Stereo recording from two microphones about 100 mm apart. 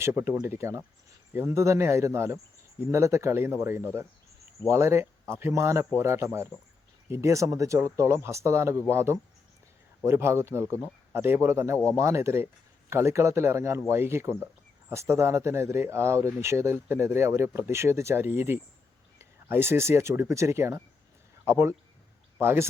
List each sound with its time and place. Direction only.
0.0 s speech: 20° right (ahead or behind)